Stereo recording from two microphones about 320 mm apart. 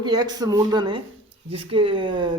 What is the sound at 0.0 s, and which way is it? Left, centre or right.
Speech, centre.